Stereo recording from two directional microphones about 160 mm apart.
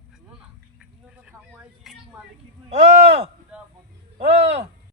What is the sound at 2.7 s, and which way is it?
Speech, 40° right (ahead or behind).